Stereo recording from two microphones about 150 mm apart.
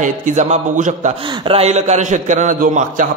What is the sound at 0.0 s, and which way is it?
A man's voice, 55° right (ahead or behind).